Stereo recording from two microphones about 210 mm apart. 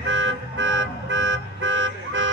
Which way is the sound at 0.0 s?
60° right (ahead or behind).